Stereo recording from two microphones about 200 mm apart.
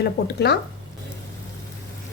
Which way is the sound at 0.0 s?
55° left (ahead or behind).